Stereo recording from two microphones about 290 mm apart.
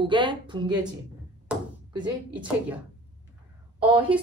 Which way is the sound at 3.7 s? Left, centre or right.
Centre.